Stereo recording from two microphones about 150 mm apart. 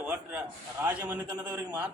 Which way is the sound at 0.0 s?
10° right (ahead or behind).